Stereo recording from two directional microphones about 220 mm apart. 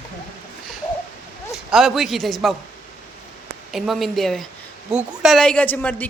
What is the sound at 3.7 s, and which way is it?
A woman's voice, centre (ahead or behind).